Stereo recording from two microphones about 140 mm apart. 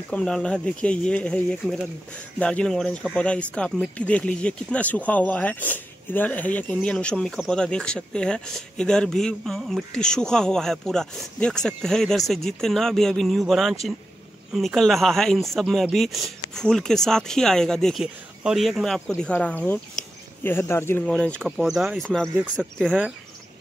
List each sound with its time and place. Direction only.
0.1 s speech: 5° left (ahead or behind)
21.0 s speech: 5° left (ahead or behind)
22.3 s speech: 10° right (ahead or behind)